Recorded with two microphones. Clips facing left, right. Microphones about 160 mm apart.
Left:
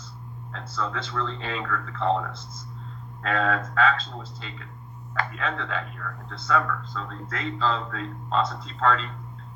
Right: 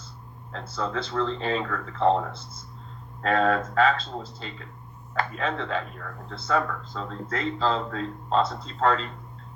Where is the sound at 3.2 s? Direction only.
40° right (ahead or behind).